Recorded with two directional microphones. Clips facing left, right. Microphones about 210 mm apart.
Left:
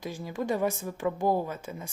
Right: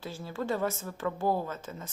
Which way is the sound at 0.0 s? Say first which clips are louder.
Left 3 dB; 15° left (ahead or behind).